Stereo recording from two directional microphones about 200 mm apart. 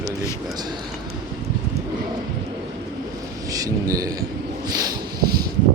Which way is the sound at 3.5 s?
15° right (ahead or behind).